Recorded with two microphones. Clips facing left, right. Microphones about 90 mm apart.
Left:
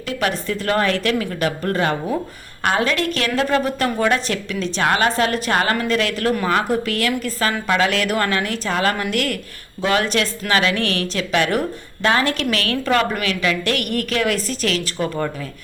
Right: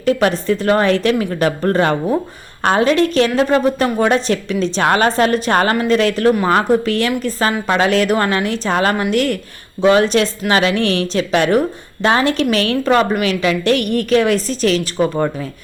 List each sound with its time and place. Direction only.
0.0 s a woman's voice: 35° right (ahead or behind)
1.3 s a woman's voice: 35° right (ahead or behind)